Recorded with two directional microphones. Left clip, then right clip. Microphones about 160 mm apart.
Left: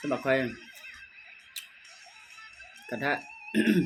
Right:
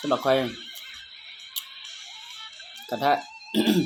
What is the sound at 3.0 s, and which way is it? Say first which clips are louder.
Speech: right 7 dB; 15° left (ahead or behind).